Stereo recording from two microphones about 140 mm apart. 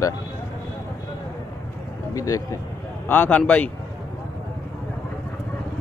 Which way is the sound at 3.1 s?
15° left (ahead or behind).